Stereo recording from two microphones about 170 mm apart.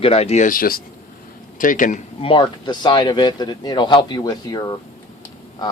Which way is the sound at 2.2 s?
30° left (ahead or behind).